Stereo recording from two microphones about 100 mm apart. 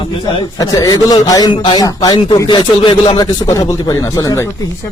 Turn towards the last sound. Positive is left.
turn(degrees=35)  # may be behind; listen again after turning